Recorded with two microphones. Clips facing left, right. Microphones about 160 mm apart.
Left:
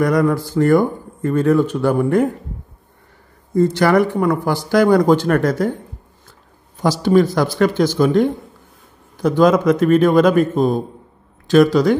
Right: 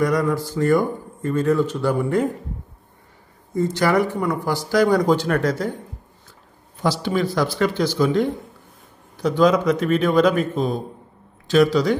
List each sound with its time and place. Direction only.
0.0 s speech: 55° left (ahead or behind)
3.5 s speech: 65° left (ahead or behind)
6.8 s a man's voice: 45° left (ahead or behind)